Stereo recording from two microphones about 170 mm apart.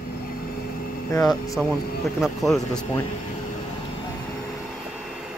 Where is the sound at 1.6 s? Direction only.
10° left (ahead or behind).